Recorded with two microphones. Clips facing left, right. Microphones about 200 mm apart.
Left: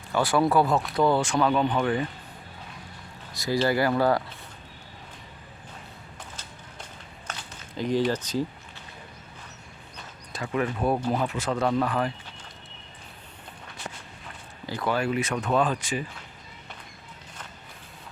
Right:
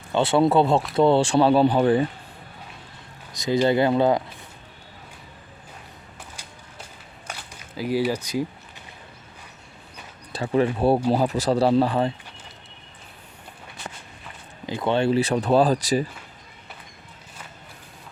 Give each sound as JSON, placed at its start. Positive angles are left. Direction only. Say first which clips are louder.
{"t": 0.1, "sound": "speech", "louder": "right 4 dB", "side_deg": -25}
{"t": 3.3, "sound": "speech", "louder": "right 4 dB", "side_deg": -20}
{"t": 6.3, "sound": "a sound", "louder": "even", "side_deg": -10}
{"t": 10.3, "sound": "speech", "louder": "right 6 dB", "side_deg": -30}
{"t": 14.7, "sound": "speech", "louder": "right 5 dB", "side_deg": -25}